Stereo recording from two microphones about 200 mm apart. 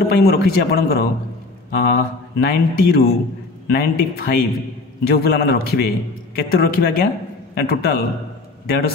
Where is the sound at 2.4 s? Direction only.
50° left (ahead or behind).